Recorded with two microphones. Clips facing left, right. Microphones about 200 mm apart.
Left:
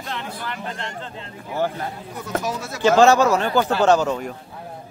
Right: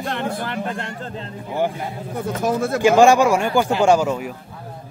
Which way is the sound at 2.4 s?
55° right (ahead or behind).